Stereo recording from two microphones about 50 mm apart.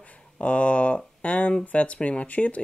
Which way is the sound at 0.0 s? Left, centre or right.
Left.